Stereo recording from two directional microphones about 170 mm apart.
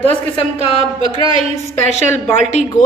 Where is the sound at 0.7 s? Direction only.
35° right (ahead or behind).